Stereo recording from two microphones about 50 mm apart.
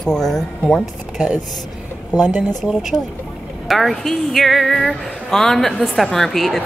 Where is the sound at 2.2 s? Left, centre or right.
Right.